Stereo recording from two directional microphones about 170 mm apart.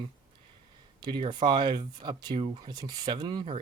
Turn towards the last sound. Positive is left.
turn(degrees=-30)  # may be behind; listen again after turning